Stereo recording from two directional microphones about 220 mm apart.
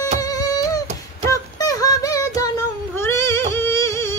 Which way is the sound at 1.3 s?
15° left (ahead or behind).